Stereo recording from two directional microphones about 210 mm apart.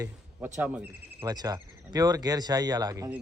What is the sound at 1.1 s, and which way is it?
A man's voice, 20° right (ahead or behind).